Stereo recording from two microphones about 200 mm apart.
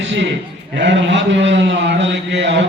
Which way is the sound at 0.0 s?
65° right (ahead or behind).